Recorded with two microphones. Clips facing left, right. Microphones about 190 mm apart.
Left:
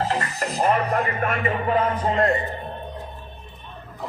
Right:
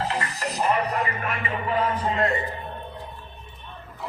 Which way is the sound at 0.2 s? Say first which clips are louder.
Left 3 dB; 50° left (ahead or behind).